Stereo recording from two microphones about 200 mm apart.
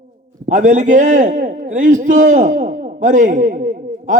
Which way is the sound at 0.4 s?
40° right (ahead or behind).